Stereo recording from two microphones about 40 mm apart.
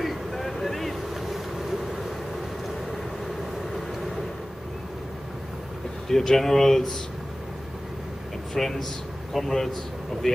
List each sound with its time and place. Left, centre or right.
0.0 s vehicle: centre
1.2 s boat: centre
6.0 s speech: centre
8.5 s speech: centre